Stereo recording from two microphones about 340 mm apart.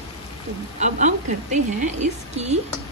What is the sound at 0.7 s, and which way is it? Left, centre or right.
Speech, right.